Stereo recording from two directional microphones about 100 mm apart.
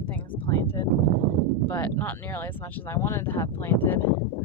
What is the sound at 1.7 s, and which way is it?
Speech, 25° left (ahead or behind).